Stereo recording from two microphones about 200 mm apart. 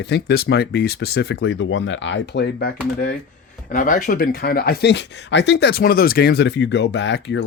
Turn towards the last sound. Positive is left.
turn(degrees=60)  # may be behind; listen again after turning